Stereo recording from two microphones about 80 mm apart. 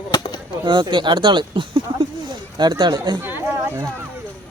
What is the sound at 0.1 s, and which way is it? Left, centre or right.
Chop, left.